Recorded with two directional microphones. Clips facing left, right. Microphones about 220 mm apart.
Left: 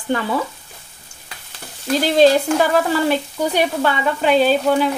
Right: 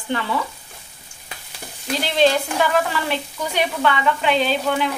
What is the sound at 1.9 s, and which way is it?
Speech, 40° left (ahead or behind).